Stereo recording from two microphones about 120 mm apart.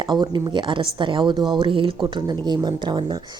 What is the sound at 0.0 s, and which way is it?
Speech, 40° right (ahead or behind).